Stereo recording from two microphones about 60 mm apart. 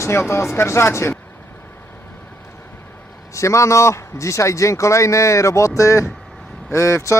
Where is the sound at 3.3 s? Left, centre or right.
Left.